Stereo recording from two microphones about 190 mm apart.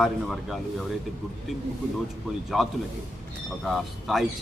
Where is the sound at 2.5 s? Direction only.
Centre (ahead or behind).